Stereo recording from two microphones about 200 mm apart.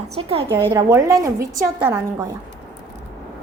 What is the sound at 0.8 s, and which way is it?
A woman's voice, 15° right (ahead or behind).